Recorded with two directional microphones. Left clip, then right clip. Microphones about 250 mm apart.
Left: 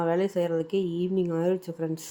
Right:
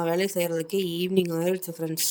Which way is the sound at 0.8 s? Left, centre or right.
Right.